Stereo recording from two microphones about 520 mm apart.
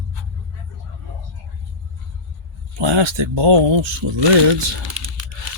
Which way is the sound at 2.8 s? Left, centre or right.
Right.